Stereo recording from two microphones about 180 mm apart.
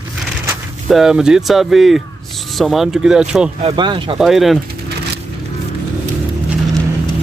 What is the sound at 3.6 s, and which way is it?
Speech, 25° right (ahead or behind).